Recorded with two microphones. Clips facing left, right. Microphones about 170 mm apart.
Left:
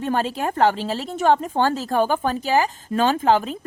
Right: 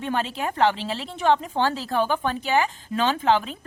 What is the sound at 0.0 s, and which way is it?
Speech, 40° left (ahead or behind).